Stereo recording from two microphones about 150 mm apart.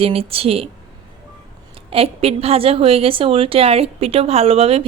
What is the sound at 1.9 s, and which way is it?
A woman's voice, 40° right (ahead or behind).